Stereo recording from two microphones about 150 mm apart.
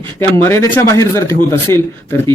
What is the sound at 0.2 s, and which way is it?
Speech, 15° left (ahead or behind).